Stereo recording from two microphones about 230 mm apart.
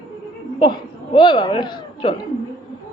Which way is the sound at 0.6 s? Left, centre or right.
Centre.